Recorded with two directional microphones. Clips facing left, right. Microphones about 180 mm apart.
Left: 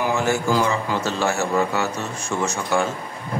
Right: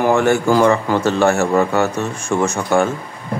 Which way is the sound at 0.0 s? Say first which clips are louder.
Right 7 dB; 60° right (ahead or behind).